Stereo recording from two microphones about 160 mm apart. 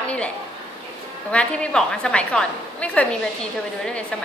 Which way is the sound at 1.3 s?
5° left (ahead or behind).